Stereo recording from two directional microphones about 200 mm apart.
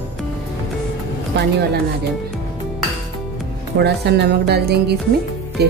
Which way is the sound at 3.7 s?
55° right (ahead or behind).